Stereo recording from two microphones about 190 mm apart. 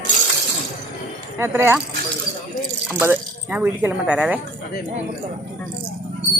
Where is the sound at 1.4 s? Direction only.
10° right (ahead or behind).